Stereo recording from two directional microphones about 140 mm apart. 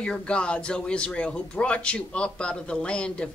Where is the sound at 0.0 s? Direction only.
5° left (ahead or behind).